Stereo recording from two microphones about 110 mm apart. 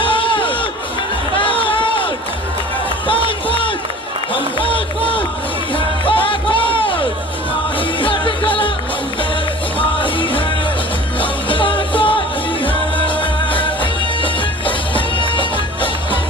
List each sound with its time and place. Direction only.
0.0 s a sound: 50° left (ahead or behind)
1.4 s music: 50° left (ahead or behind)
3.1 s music: 55° left (ahead or behind)
9.7 s music: 50° left (ahead or behind)